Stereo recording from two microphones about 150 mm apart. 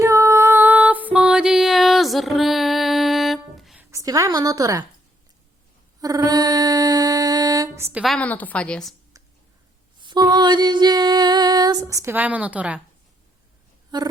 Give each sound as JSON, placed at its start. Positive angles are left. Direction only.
{"t": 0.0, "sound": "music", "side_deg": -20}
{"t": 4.0, "sound": "music", "side_deg": -25}
{"t": 6.0, "sound": "a sound", "side_deg": -25}
{"t": 8.0, "sound": "a woman's voice", "side_deg": 5}
{"t": 10.0, "sound": "music", "side_deg": -30}
{"t": 13.9, "sound": "music", "side_deg": -30}